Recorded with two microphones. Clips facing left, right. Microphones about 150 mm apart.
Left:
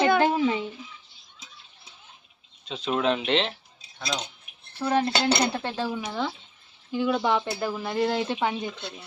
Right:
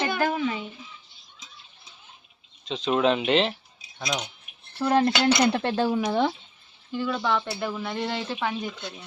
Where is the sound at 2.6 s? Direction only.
5° left (ahead or behind).